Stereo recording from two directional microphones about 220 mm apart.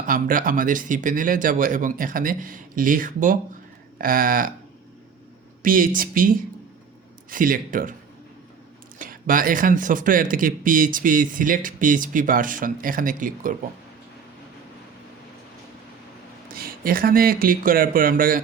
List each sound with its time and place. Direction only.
0.1 s speech: 40° right (ahead or behind)
5.6 s speech: 40° right (ahead or behind)
9.0 s speech: 40° right (ahead or behind)
16.5 s speech: 40° right (ahead or behind)